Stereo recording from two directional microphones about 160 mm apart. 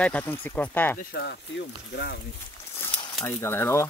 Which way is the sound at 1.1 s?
90° left.